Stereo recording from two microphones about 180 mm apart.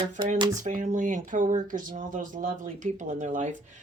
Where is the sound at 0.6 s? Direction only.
45° right (ahead or behind).